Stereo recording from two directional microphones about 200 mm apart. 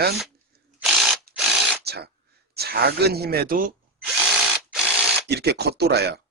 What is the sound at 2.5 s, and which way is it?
Speech, 55° right (ahead or behind).